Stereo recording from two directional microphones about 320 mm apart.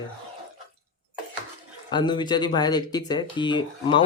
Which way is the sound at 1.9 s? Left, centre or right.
Centre.